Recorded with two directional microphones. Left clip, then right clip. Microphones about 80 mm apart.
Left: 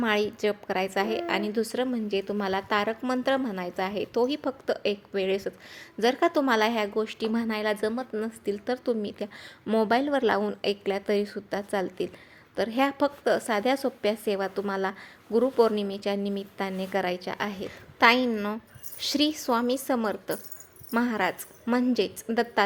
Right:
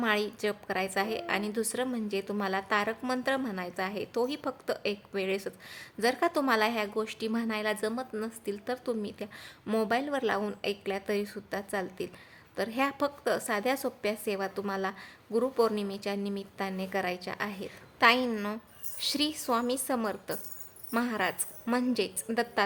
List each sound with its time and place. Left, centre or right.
0.0 s a woman's voice: left
18.3 s a woman's voice: centre
18.5 s a woman's voice: left
22.3 s a woman's voice: centre